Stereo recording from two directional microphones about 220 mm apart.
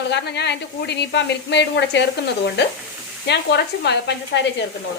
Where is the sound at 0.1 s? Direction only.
50° left (ahead or behind).